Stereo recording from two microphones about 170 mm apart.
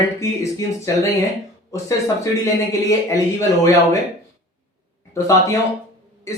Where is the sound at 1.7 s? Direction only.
20° left (ahead or behind).